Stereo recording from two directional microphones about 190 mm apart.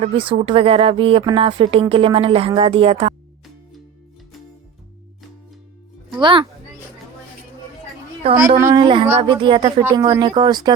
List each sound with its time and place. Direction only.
0.0 s speech: 30° right (ahead or behind)
6.1 s speech: 25° right (ahead or behind)
8.2 s speech: 30° right (ahead or behind)